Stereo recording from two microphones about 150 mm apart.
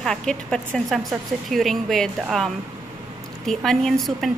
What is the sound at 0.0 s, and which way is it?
A woman's voice, 5° left (ahead or behind).